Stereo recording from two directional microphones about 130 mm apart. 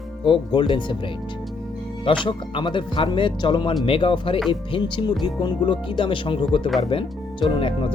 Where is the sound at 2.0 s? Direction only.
40° left (ahead or behind).